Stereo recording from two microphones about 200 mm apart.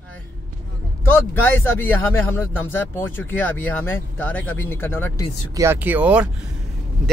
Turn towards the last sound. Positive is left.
turn(degrees=-5)  # may be behind; listen again after turning